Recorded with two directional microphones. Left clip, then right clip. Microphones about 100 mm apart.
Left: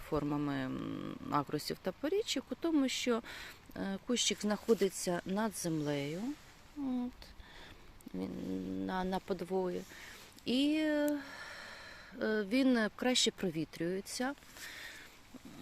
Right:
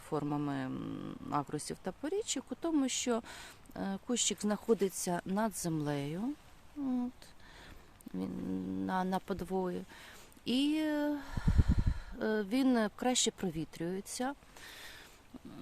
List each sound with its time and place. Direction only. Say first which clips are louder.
0.1 s speech: even; 40° right (ahead or behind)
4.9 s speech: even; 60° right (ahead or behind)
8.9 s speech: right 2 dB; 55° right (ahead or behind); by 14.8 s 35° right (ahead or behind)